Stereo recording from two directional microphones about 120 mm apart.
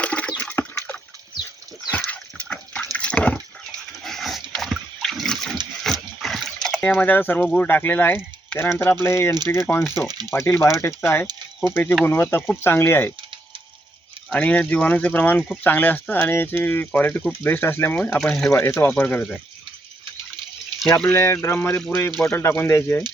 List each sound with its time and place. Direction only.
0.0 s water: 10° left (ahead or behind)
1.9 s dog: 15° left (ahead or behind)
2.9 s water: 10° left (ahead or behind)
4.0 s dog: centre (ahead or behind)
4.5 s splash: centre (ahead or behind)
5.8 s dog: centre (ahead or behind)
6.9 s speech: 15° left (ahead or behind)
14.3 s speech: 10° left (ahead or behind)
17.9 s speech: 10° left (ahead or behind)
18.5 s speech: 15° left (ahead or behind)
21.1 s speech: 20° left (ahead or behind)
21.8 s speech: 5° left (ahead or behind)
22.3 s speech: 20° left (ahead or behind)